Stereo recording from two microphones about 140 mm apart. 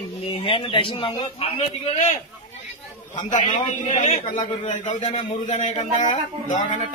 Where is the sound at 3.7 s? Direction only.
60° left (ahead or behind).